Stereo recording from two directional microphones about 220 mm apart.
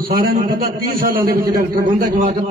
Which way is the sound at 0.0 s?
40° right (ahead or behind).